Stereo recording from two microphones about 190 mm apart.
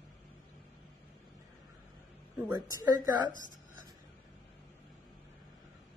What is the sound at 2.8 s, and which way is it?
Speech, 20° right (ahead or behind).